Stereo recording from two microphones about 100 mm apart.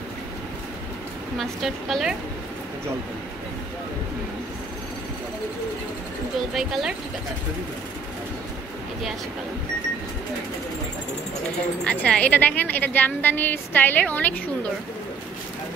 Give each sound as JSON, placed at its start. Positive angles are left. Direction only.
{"t": 1.4, "sound": "speech", "side_deg": 0}
{"t": 6.5, "sound": "speech", "side_deg": -5}
{"t": 11.8, "sound": "a woman's voice", "side_deg": 10}